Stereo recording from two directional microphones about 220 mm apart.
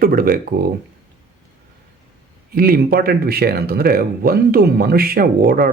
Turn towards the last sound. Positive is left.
turn(degrees=-40)  # may be behind; listen again after turning